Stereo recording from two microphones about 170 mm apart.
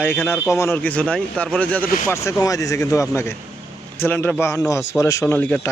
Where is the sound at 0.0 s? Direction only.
10° left (ahead or behind).